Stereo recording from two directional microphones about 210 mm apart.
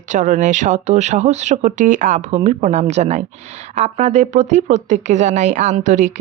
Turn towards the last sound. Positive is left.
turn(degrees=-35)  # may be behind; listen again after turning